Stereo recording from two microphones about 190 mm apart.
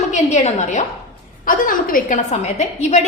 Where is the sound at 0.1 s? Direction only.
40° left (ahead or behind).